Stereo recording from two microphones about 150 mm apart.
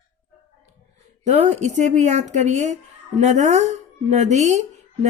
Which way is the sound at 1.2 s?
50° right (ahead or behind).